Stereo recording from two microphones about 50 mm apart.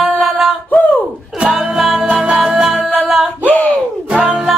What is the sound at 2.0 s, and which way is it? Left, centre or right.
Music, centre.